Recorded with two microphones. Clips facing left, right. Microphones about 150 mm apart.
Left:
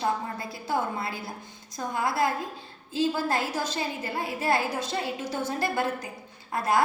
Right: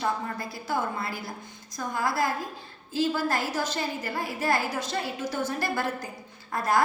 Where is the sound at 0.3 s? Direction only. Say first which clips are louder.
Left 1 dB; 25° left (ahead or behind).